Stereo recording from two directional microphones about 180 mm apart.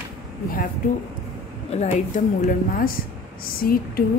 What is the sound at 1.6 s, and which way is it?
Speech, 40° left (ahead or behind).